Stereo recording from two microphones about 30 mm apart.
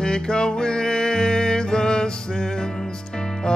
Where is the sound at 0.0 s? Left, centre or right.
Left.